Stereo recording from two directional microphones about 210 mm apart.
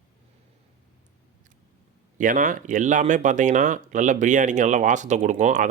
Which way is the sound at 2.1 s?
40° right (ahead or behind).